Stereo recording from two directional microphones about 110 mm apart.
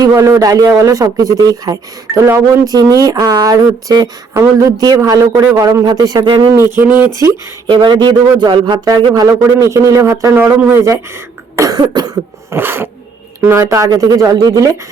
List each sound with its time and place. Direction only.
0.0 s speech: 30° right (ahead or behind)
7.7 s speech: 45° right (ahead or behind); by 11.0 s 25° right (ahead or behind)
11.5 s cough: 35° right (ahead or behind)
12.5 s speech: 20° right (ahead or behind)